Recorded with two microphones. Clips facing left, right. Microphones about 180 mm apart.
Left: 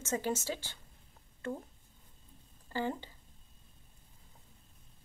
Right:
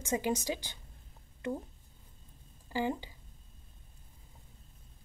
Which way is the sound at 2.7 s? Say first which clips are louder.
Right 2 dB; 10° right (ahead or behind).